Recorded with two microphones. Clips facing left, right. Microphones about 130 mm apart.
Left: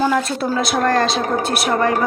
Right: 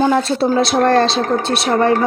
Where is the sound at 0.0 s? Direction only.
30° right (ahead or behind).